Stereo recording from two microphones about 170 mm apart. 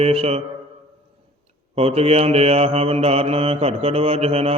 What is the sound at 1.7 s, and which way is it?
Mantra, 35° right (ahead or behind).